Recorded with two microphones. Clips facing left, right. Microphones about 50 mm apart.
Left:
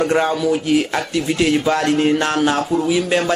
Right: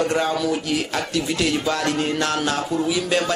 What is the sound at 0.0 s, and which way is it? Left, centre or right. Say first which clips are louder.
Speech: left 4 dB; left.